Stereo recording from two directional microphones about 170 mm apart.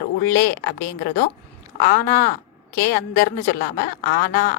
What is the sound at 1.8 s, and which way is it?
Speech, 55° left (ahead or behind).